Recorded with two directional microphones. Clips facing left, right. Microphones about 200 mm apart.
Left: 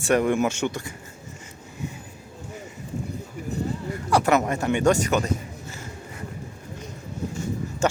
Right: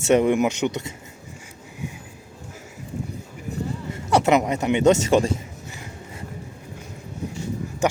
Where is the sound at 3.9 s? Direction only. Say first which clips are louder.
Right 2 dB; 25° right (ahead or behind).